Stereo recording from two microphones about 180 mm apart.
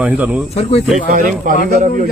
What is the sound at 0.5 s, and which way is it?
Speech, 35° left (ahead or behind).